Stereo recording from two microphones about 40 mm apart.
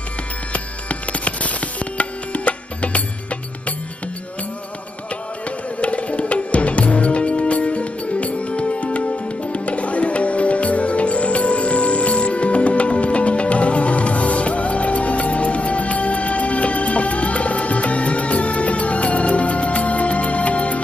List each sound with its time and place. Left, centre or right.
0.5 s music: left
5.8 s music: left